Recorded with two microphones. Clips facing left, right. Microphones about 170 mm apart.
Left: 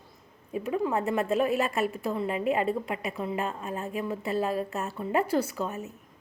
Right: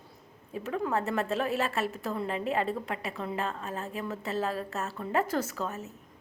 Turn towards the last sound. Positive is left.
turn(degrees=15)  # may be behind; listen again after turning